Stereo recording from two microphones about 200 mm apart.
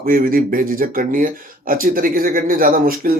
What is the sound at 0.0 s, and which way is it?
Speech, 45° right (ahead or behind).